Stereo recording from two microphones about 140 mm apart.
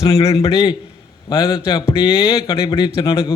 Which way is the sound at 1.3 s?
35° left (ahead or behind).